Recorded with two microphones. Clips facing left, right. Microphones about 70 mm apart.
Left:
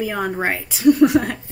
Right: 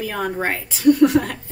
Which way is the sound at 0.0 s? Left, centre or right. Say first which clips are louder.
Left 1 dB; centre.